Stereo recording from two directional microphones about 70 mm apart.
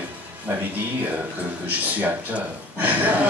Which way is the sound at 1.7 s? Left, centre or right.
Right.